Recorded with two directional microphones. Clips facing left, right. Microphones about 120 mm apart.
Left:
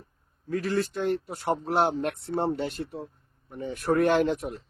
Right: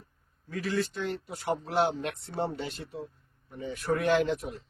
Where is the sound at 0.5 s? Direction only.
45° left (ahead or behind).